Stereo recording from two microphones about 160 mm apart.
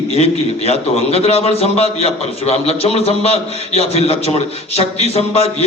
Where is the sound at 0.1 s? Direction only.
40° left (ahead or behind).